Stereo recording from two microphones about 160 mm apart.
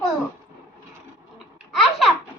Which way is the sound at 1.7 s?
Centre (ahead or behind).